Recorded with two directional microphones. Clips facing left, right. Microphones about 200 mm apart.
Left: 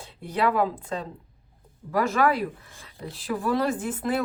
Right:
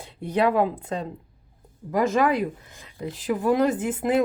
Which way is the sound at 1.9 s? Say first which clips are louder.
Right 2 dB; 20° right (ahead or behind).